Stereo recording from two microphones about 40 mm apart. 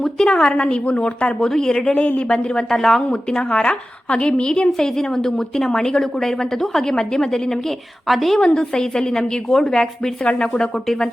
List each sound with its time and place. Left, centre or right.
0.3 s a woman's voice: left
1.4 s a woman's voice: centre
1.9 s speech: left
2.2 s a woman's voice: left
3.1 s a woman's voice: left; by 8.4 s centre
8.4 s a woman's voice: centre
10.8 s a woman's voice: centre